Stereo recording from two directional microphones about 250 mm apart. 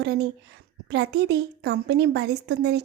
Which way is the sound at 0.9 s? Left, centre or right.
Right.